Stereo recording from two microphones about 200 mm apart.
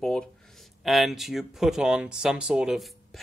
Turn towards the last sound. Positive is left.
turn(degrees=0)  # may be behind; listen again after turning